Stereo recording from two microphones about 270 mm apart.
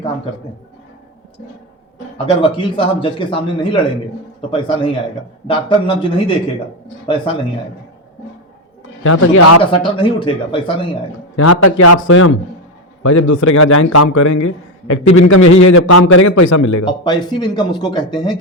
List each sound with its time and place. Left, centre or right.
2.1 s speech: centre
9.0 s speech: left
9.7 s speech: centre
11.3 s speech: left
12.0 s a man's voice: left
13.6 s a man's voice: left
16.8 s speech: centre